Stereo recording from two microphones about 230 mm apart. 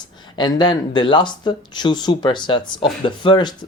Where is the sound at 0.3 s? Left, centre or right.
Centre.